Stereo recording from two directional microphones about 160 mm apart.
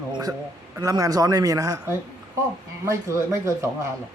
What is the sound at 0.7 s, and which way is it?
Speech, 20° right (ahead or behind).